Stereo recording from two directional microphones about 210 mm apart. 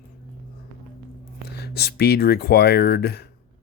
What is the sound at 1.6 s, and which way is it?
Speech, 50° left (ahead or behind).